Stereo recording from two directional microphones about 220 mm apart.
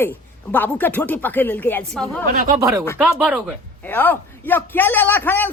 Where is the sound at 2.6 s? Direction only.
15° right (ahead or behind).